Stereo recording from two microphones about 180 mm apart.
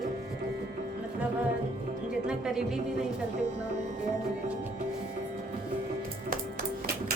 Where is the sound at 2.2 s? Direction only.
5° right (ahead or behind).